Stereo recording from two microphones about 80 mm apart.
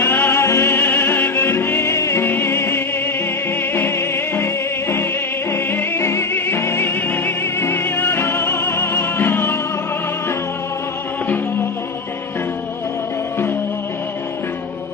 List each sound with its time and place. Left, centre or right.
0.0 s music: left